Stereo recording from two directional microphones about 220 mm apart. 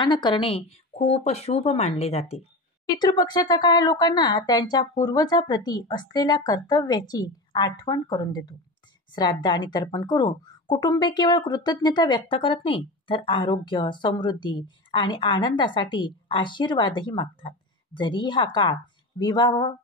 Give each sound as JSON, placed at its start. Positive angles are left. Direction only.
{"t": 0.0, "sound": "a woman's voice", "side_deg": 20}